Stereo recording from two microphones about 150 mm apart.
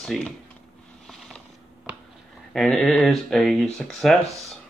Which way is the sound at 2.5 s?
5° left (ahead or behind).